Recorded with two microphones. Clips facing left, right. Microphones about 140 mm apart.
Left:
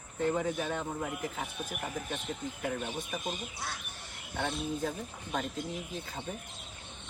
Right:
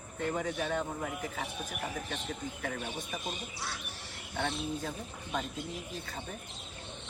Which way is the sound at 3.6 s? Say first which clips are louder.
Right 2 dB; 50° left (ahead or behind).